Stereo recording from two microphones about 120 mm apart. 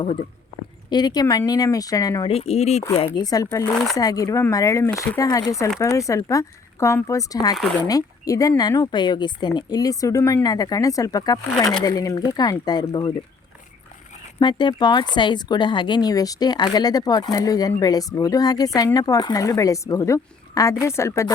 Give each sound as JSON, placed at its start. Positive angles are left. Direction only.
{"t": 0.9, "sound": "speech", "side_deg": 35}
{"t": 2.2, "sound": "speech", "side_deg": 55}
{"t": 3.2, "sound": "speech", "side_deg": 30}
{"t": 14.3, "sound": "speech", "side_deg": 40}